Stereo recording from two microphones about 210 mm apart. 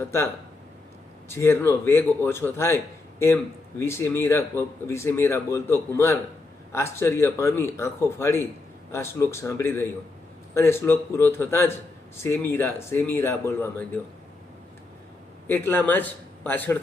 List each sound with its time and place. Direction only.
0.0 s a man's voice: 10° left (ahead or behind)
1.3 s a man's voice: 10° left (ahead or behind)
15.4 s a man's voice: 10° left (ahead or behind)